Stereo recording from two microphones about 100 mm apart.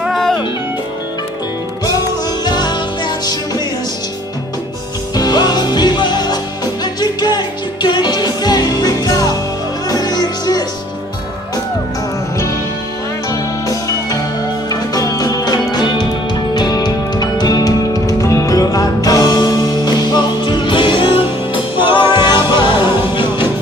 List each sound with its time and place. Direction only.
0.0 s music: 5° left (ahead or behind)
2.4 s music: 45° left (ahead or behind)
5.1 s music: 40° left (ahead or behind)
13.3 s music: 35° left (ahead or behind); by 23.4 s 55° left (ahead or behind)